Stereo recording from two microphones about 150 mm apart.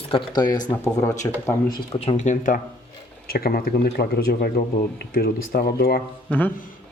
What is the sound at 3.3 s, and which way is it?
Speech, 85° left.